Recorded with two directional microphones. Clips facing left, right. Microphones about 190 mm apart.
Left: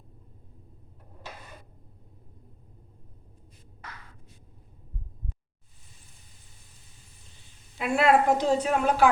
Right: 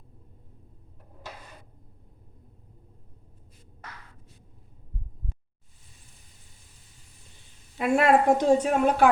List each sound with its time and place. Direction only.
7.8 s a woman's voice: 45° right (ahead or behind)